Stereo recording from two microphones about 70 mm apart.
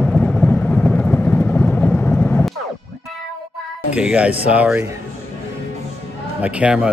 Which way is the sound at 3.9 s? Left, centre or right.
Centre.